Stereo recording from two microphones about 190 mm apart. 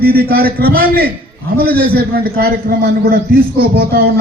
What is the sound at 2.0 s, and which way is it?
A man's voice, 55° right (ahead or behind).